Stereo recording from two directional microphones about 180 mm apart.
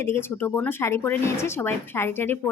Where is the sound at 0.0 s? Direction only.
15° left (ahead or behind).